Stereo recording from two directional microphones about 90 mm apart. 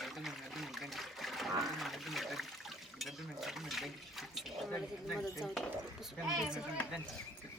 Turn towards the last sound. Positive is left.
turn(degrees=-5)  # may be behind; listen again after turning